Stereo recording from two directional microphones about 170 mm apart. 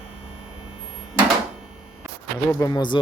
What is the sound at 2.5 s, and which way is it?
Speech, 20° left (ahead or behind).